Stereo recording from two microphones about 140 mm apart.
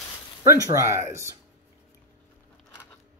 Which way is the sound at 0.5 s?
20° right (ahead or behind).